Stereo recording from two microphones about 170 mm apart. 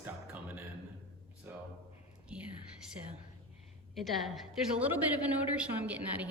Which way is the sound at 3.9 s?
Centre (ahead or behind).